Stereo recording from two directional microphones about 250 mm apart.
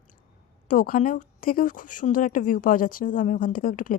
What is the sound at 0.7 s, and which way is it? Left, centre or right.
Speech, left.